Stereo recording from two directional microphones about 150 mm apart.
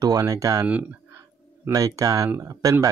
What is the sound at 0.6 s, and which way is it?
Speech, 10° right (ahead or behind).